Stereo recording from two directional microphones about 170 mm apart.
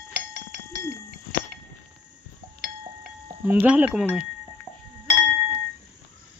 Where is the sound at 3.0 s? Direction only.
10° right (ahead or behind).